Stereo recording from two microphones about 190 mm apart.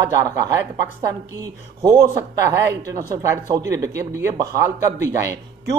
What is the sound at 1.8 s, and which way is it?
Speech, 20° right (ahead or behind).